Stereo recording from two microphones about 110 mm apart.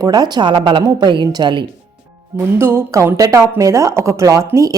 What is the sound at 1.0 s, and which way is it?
Speech, 40° right (ahead or behind).